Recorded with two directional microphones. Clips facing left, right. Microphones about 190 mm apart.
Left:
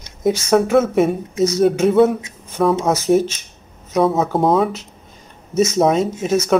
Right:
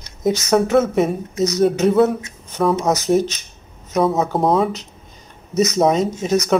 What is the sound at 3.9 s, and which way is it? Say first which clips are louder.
Speech: left 1 dB; centre (ahead or behind).